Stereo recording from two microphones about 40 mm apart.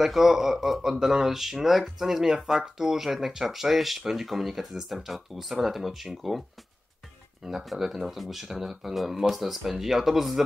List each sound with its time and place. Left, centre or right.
0.0 s speech: centre
7.6 s speech: centre